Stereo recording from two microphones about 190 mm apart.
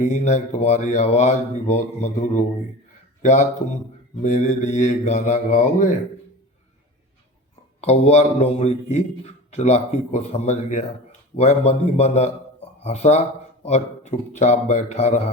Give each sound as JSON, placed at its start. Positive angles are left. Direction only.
{"t": 0.0, "sound": "a man's voice", "side_deg": 40}
{"t": 4.2, "sound": "a man's voice", "side_deg": 40}
{"t": 7.8, "sound": "a man's voice", "side_deg": 35}